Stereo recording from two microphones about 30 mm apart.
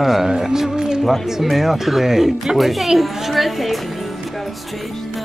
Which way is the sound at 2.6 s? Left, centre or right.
Centre.